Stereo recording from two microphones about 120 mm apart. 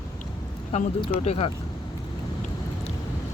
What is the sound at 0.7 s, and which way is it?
Speech, 65° left (ahead or behind).